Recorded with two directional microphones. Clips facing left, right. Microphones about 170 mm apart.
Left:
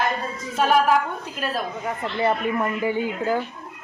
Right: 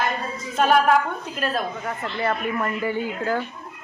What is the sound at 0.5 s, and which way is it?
A woman's voice, 5° left (ahead or behind).